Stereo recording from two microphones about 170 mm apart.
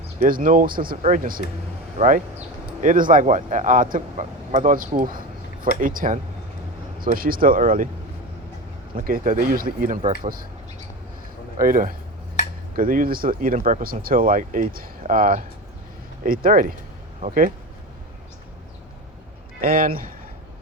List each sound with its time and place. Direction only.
0.2 s a man's voice: 55° right (ahead or behind)
9.0 s speech: 55° right (ahead or behind)
11.5 s a man's voice: 55° right (ahead or behind)
19.6 s speech: 55° right (ahead or behind)